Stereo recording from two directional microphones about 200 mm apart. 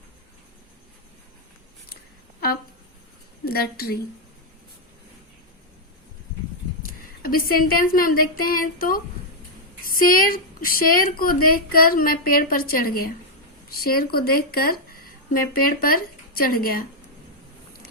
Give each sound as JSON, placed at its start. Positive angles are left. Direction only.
{"t": 3.4, "sound": "a woman's voice", "side_deg": 50}
{"t": 7.2, "sound": "a woman's voice", "side_deg": 45}